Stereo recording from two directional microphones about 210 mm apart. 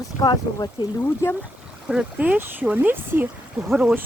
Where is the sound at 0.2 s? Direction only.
20° left (ahead or behind).